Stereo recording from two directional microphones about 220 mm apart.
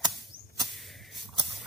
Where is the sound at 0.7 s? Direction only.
Centre (ahead or behind).